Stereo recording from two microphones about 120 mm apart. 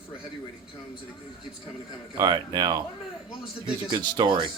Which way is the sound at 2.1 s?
35° right (ahead or behind).